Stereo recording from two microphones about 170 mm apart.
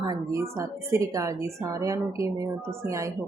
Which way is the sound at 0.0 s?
20° right (ahead or behind).